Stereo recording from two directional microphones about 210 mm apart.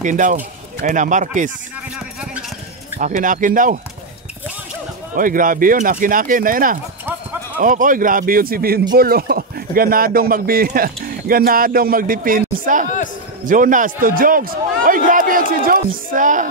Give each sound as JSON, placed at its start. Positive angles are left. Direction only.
{"t": 0.0, "sound": "a man's voice", "side_deg": -35}
{"t": 3.0, "sound": "a man's voice", "side_deg": -40}
{"t": 5.1, "sound": "a man's voice", "side_deg": -40}